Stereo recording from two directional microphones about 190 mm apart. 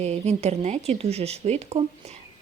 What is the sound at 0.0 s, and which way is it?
Speech, 35° right (ahead or behind).